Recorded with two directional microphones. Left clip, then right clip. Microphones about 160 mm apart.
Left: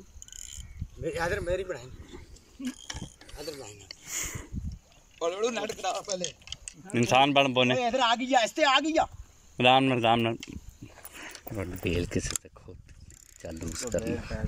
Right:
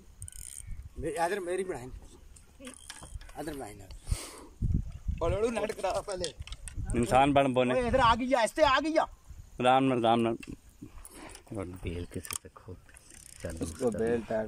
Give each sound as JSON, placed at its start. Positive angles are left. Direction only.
{"t": 1.0, "sound": "a man's voice", "side_deg": -25}
{"t": 3.9, "sound": "a sound", "side_deg": -10}
{"t": 5.2, "sound": "speech", "side_deg": -10}
{"t": 11.1, "sound": "dog", "side_deg": -15}
{"t": 11.8, "sound": "speech", "side_deg": 15}
{"t": 13.4, "sound": "mechanisms", "side_deg": 25}
{"t": 13.7, "sound": "speech", "side_deg": -65}